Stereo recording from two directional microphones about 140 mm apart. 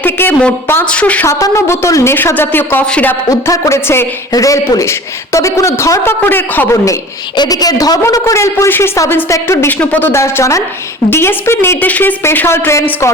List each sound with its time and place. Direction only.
0.0 s a woman's voice: 15° left (ahead or behind)
3.2 s a woman's voice: 25° left (ahead or behind)
7.3 s a woman's voice: 25° left (ahead or behind)